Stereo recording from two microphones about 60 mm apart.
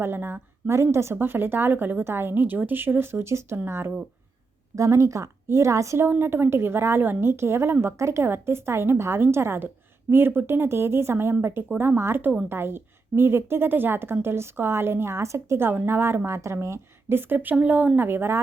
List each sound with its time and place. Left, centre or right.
0.0 s a woman's voice: right
0.7 s a woman's voice: right
1.1 s a woman's voice: right
4.7 s a woman's voice: right
6.1 s a woman's voice: right